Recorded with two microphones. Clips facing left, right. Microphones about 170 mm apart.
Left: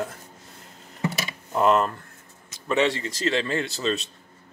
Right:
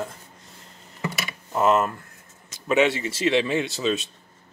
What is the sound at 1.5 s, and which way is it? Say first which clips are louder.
Speech: even; 5° right (ahead or behind).